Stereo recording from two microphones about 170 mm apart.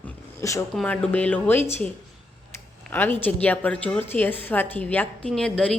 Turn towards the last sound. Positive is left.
turn(degrees=5)  # may be behind; listen again after turning